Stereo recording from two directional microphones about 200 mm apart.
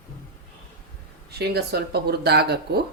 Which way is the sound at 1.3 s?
55° right (ahead or behind).